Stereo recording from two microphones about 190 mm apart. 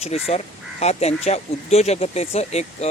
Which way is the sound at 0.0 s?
35° left (ahead or behind).